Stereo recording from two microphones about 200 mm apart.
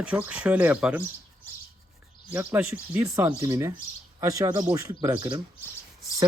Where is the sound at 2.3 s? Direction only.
10° right (ahead or behind).